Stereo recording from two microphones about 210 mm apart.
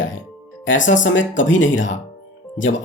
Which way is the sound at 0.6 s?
65° left (ahead or behind).